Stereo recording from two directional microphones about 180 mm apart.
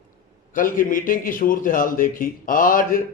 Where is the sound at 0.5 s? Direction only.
50° left (ahead or behind).